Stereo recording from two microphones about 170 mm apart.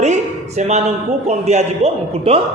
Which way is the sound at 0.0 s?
40° right (ahead or behind).